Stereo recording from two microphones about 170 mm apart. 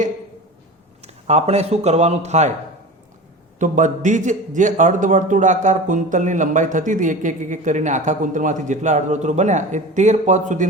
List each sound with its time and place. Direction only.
1.0 s a man's voice: 40° right (ahead or behind)
3.6 s a man's voice: 45° right (ahead or behind)